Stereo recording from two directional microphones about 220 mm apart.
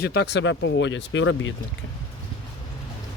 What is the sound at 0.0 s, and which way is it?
Speech, 50° left (ahead or behind).